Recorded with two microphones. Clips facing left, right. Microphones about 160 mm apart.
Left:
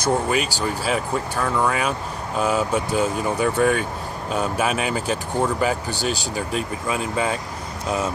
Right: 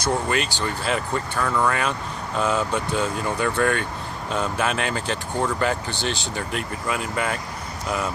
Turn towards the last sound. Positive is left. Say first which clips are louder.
# left 2 dB
turn(degrees=20)  # may be behind; listen again after turning